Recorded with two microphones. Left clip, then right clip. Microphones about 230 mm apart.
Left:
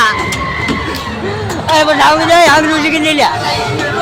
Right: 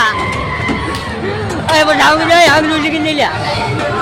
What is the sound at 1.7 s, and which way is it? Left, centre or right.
Speech, centre.